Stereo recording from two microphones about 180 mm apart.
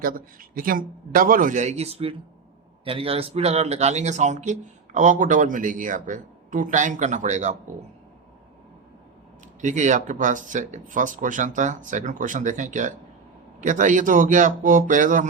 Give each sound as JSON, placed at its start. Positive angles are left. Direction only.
{"t": 0.0, "sound": "speech", "side_deg": -50}
{"t": 9.6, "sound": "speech", "side_deg": -45}